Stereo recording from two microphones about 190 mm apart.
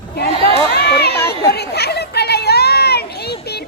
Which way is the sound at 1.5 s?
60° left (ahead or behind).